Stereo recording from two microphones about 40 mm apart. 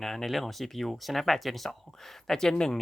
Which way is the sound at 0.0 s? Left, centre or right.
Centre.